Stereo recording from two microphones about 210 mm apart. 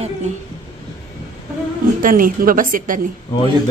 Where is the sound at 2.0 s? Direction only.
40° right (ahead or behind).